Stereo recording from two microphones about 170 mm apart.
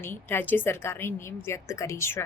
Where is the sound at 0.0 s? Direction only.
15° left (ahead or behind).